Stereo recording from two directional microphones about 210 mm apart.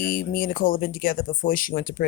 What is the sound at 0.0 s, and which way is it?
Speech, 45° left (ahead or behind).